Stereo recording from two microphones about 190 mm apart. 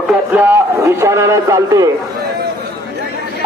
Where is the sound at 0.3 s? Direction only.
10° right (ahead or behind).